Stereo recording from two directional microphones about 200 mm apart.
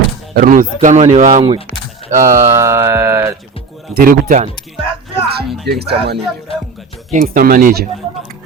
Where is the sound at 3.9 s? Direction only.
45° right (ahead or behind).